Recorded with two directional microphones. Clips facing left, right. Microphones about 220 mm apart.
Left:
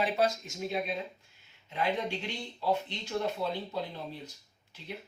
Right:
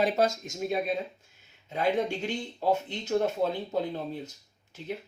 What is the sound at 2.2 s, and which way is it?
Speech, 45° right (ahead or behind).